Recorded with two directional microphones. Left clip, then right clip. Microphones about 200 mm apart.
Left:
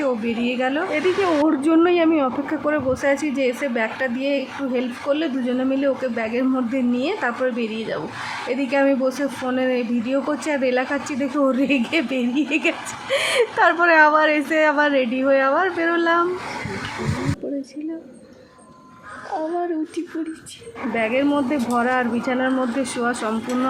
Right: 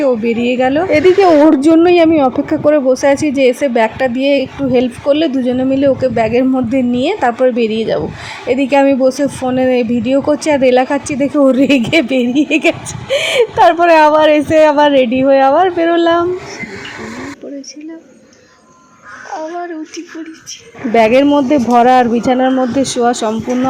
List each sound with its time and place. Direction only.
0.0 s speech: 20° right (ahead or behind)
20.9 s speech: 35° right (ahead or behind)